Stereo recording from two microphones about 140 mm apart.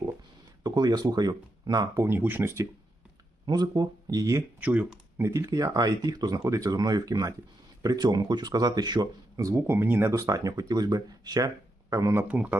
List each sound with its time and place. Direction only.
0.6 s speech: 30° right (ahead or behind)
2.0 s speech: 15° right (ahead or behind)
3.4 s speech: 30° right (ahead or behind)
4.6 s speech: 10° right (ahead or behind)
12.3 s speech: 10° right (ahead or behind)